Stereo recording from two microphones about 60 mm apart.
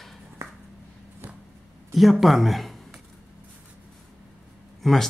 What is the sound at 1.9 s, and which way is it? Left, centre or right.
Speech, centre.